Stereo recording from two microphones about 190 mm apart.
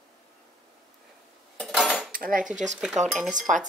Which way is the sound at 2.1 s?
45° right (ahead or behind).